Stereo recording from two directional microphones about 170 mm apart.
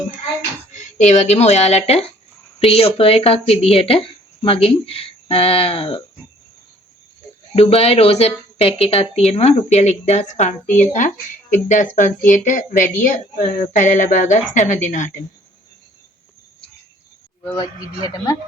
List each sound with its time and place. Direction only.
0.7 s speech: 45° left (ahead or behind)
7.5 s a woman's voice: 35° left (ahead or behind)
17.6 s speech: 25° left (ahead or behind)